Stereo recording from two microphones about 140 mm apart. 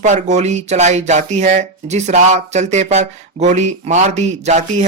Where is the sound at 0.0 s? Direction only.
60° right (ahead or behind).